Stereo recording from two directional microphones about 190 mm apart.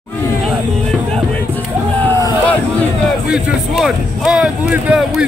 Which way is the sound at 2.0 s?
10° left (ahead or behind).